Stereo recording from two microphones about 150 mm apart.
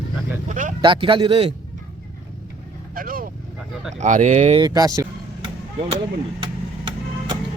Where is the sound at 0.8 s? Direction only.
35° right (ahead or behind).